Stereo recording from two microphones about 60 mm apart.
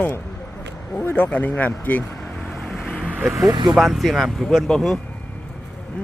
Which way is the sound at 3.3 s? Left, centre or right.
Right.